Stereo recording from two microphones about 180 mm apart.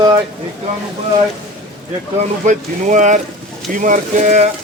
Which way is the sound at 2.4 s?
45° right (ahead or behind).